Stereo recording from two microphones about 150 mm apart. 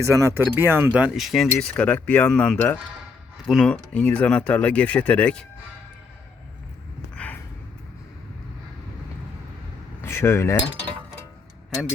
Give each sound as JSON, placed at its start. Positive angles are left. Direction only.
{"t": 0.0, "sound": "speech", "side_deg": -20}
{"t": 10.0, "sound": "speech", "side_deg": 15}